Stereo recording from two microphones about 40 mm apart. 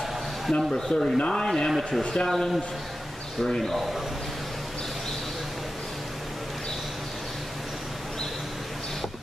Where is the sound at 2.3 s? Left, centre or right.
Centre.